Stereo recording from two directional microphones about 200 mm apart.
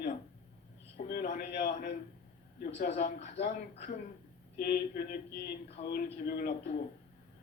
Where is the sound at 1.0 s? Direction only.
45° left (ahead or behind).